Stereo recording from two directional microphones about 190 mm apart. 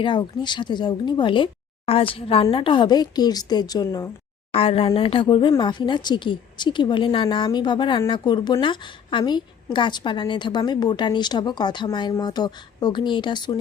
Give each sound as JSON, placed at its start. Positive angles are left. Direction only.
{"t": 0.0, "sound": "a woman's voice", "side_deg": 25}
{"t": 4.5, "sound": "a woman's voice", "side_deg": 30}